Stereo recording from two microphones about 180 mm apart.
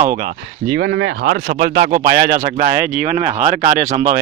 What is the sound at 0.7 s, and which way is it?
Speech, 90° right.